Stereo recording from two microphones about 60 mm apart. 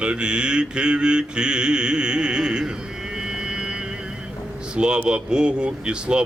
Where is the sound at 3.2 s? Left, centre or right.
Centre.